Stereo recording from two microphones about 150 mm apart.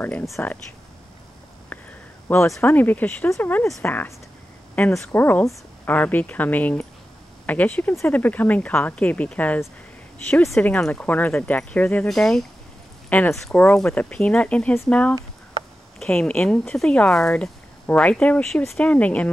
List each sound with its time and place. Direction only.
0.0 s speech: 15° left (ahead or behind)
2.2 s speech: 15° left (ahead or behind)